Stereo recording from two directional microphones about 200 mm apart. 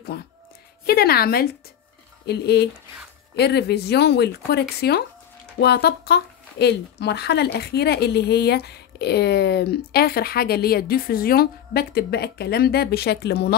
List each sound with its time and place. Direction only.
0.1 s speech: 50° left (ahead or behind)